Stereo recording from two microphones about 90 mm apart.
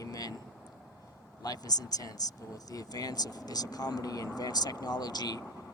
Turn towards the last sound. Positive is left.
turn(degrees=45)  # may be behind; listen again after turning